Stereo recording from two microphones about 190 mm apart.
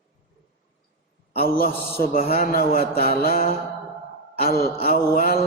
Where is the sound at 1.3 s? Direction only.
55° left (ahead or behind).